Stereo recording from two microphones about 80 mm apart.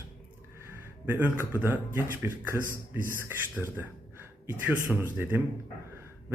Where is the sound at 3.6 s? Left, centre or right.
Centre.